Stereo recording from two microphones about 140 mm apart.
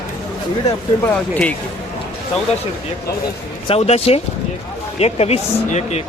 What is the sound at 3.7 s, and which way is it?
Speech, 45° left (ahead or behind).